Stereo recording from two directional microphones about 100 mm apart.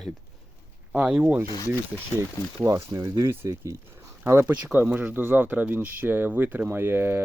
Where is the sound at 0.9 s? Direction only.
10° right (ahead or behind).